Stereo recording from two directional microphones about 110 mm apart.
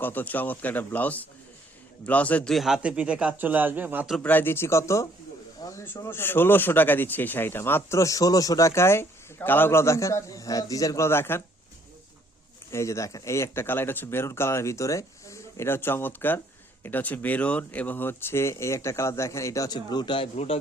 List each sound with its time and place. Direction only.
0.0 s a man's voice: 15° left (ahead or behind); by 4.1 s 15° right (ahead or behind)
4.2 s speech: 15° left (ahead or behind)
12.7 s speech: 25° left (ahead or behind); by 20.2 s 45° left (ahead or behind)
20.3 s a man's voice: 70° left (ahead or behind)